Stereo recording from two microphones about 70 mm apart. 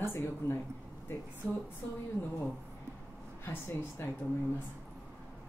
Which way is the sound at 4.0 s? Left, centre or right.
Left.